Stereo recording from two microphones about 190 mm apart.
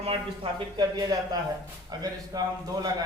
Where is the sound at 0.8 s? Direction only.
20° right (ahead or behind).